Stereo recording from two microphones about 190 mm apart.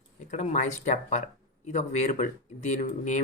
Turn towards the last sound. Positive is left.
turn(degrees=40)  # may be behind; listen again after turning